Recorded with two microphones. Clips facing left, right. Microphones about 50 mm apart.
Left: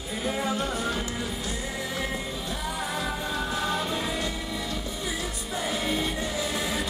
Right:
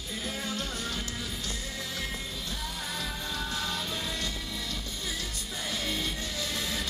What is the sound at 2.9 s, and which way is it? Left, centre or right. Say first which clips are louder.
Music: left 6 dB; centre.